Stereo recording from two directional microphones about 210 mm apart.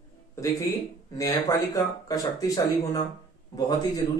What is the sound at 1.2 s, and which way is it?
A man's voice, 15° left (ahead or behind).